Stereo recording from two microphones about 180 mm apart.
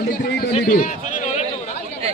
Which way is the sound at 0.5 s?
50° left (ahead or behind).